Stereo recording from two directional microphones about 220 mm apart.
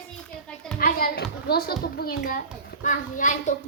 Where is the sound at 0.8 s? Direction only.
40° left (ahead or behind).